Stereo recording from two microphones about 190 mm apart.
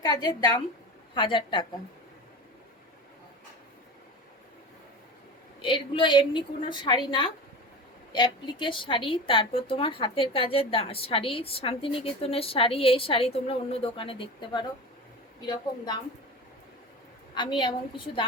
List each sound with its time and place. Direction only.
0.2 s speech: 20° left (ahead or behind)
5.6 s speech: 25° left (ahead or behind)
17.6 s speech: 25° left (ahead or behind)